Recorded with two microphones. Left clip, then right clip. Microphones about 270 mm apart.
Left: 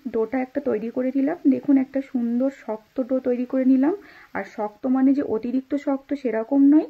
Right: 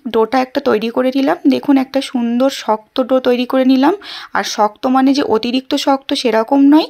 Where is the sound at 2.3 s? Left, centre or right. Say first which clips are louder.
Right 13 dB; right.